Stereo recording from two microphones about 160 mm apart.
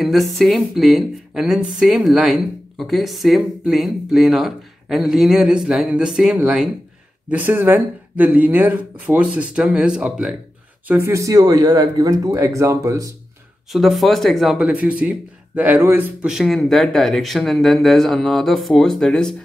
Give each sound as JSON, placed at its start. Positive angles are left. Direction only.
{"t": 0.0, "sound": "a woman's voice", "side_deg": 0}
{"t": 10.9, "sound": "speech", "side_deg": -15}
{"t": 13.7, "sound": "a woman's voice", "side_deg": 0}